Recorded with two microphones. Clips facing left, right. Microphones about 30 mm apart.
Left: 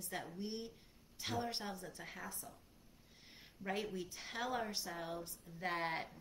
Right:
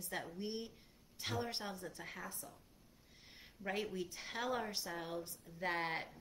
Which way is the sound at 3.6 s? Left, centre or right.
Centre.